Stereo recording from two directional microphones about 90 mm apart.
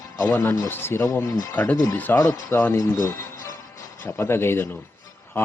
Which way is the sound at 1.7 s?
35° left (ahead or behind).